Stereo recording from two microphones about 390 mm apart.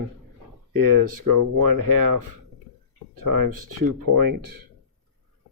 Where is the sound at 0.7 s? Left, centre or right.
Right.